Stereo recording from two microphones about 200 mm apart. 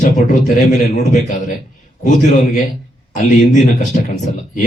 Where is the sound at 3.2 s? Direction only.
40° left (ahead or behind).